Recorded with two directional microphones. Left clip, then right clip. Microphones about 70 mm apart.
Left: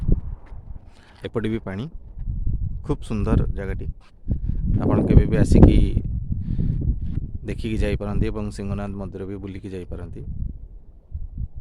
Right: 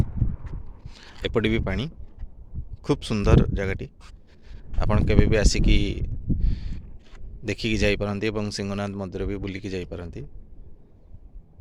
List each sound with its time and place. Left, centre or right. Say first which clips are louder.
0.9 s speech: right 3 dB; left
2.8 s speech: right 3 dB; left
4.4 s a sound: left 3 dB; left
4.9 s speech: left 1 dB; left
8.1 s speech: right 2 dB; left
9.8 s speech: right 2 dB; left